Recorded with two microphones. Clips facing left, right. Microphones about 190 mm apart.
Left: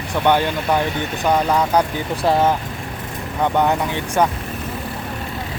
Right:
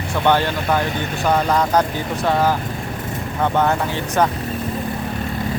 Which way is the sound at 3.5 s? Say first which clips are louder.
Even; 15° left (ahead or behind).